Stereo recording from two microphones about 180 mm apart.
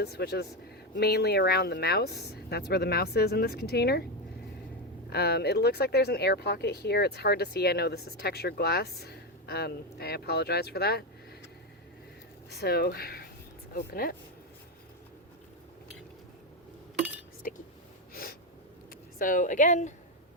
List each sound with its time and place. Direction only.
0.0 s speech: 60° left (ahead or behind)
5.0 s speech: 60° left (ahead or behind)
12.5 s speech: 60° left (ahead or behind)
18.1 s sneeze: 55° left (ahead or behind)
19.2 s a woman's voice: 45° left (ahead or behind)